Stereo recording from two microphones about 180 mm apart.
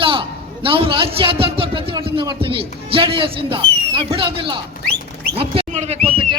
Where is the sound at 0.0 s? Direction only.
30° right (ahead or behind).